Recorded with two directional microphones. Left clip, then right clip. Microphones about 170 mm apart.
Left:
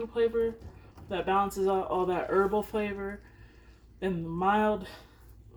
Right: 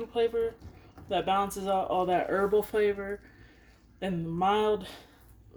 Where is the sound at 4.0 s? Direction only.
50° right (ahead or behind).